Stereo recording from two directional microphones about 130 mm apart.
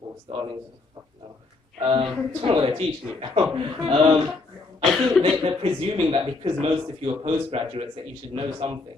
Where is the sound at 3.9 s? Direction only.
45° right (ahead or behind).